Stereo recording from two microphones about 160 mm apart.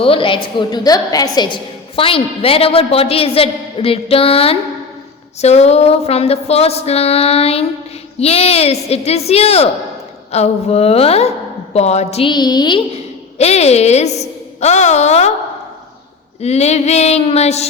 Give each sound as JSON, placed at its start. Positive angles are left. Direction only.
{"t": 0.0, "sound": "a woman's voice", "side_deg": 35}
{"t": 12.3, "sound": "a woman's voice", "side_deg": 25}
{"t": 13.4, "sound": "a woman's voice", "side_deg": 40}
{"t": 16.4, "sound": "a woman's voice", "side_deg": 45}